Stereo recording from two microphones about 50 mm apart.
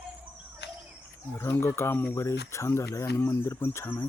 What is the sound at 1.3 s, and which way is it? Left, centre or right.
Speech, left.